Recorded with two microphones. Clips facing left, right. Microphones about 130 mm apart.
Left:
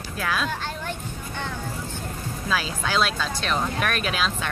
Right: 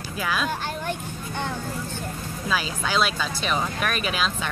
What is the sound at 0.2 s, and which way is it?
Speech, centre (ahead or behind).